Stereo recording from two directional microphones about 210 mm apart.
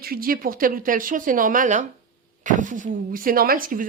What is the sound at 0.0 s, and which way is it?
Speech, 45° right (ahead or behind).